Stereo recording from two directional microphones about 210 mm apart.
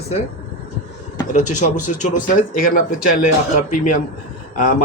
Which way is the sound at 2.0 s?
35° left (ahead or behind).